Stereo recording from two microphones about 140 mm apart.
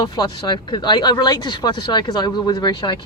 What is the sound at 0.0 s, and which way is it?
Speech, 30° left (ahead or behind).